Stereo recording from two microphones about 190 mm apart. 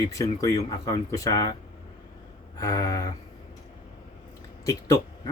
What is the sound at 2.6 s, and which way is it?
Speech, 20° left (ahead or behind).